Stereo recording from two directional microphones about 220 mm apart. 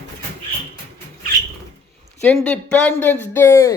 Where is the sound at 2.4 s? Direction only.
5° left (ahead or behind).